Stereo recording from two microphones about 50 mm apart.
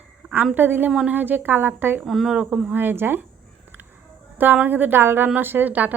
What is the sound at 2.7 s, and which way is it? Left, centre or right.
Speech, right.